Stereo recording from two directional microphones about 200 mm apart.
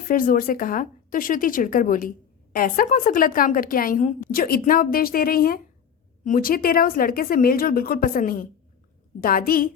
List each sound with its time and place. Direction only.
0.1 s speech: 45° left (ahead or behind)